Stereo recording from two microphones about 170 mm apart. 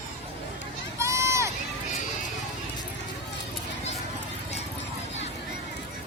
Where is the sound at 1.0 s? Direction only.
15° right (ahead or behind).